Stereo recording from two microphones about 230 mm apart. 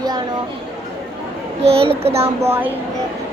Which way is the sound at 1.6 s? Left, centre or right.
Right.